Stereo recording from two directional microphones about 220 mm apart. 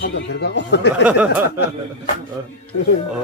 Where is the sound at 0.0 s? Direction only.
55° left (ahead or behind).